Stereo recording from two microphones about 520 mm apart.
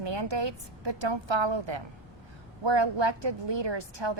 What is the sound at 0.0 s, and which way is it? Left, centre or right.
A woman's voice, right.